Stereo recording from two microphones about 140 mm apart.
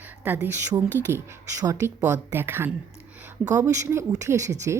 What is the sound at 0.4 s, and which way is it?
A woman's voice, 20° right (ahead or behind).